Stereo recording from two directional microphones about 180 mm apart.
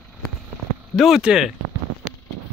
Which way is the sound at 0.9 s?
Centre (ahead or behind).